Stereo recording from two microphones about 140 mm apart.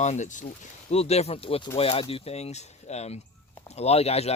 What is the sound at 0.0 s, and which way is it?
Speech, 60° left (ahead or behind).